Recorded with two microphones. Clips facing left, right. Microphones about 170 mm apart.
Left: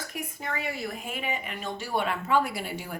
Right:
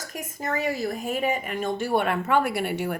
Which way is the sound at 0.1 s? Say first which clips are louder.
Right 7 dB; 45° right (ahead or behind).